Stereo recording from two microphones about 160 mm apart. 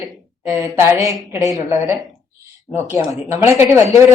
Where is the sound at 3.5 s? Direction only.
15° right (ahead or behind).